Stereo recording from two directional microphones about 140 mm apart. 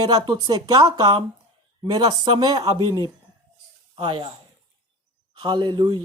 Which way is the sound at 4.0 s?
40° right (ahead or behind).